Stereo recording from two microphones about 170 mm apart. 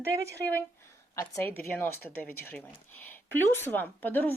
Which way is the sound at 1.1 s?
20° left (ahead or behind).